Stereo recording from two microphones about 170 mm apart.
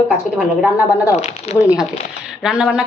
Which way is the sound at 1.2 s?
40° left (ahead or behind).